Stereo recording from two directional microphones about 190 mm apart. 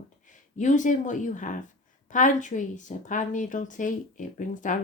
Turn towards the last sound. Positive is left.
turn(degrees=40)  # may be behind; listen again after turning